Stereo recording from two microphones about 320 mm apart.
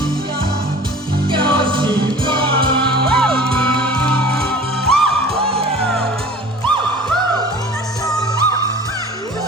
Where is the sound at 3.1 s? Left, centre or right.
Centre.